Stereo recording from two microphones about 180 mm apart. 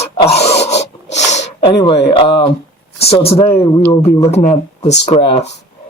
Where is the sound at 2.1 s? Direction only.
30° left (ahead or behind).